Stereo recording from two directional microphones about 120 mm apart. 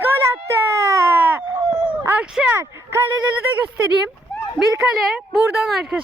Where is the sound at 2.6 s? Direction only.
20° right (ahead or behind).